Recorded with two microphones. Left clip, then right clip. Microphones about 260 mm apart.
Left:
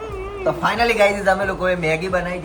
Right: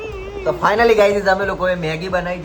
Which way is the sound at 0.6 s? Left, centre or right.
Centre.